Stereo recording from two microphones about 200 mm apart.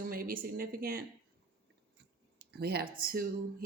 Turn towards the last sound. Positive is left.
turn(degrees=-45)  # may be behind; listen again after turning